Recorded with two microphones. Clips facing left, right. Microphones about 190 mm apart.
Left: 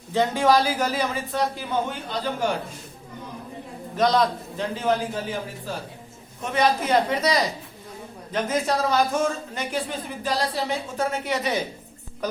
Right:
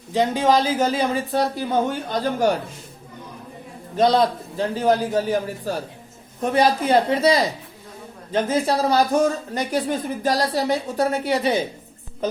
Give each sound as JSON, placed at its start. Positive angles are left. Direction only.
{"t": 0.1, "sound": "speech", "side_deg": -15}
{"t": 3.9, "sound": "a man's voice", "side_deg": -30}